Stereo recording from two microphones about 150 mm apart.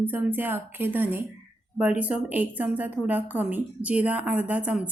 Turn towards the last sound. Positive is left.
turn(degrees=-10)  # may be behind; listen again after turning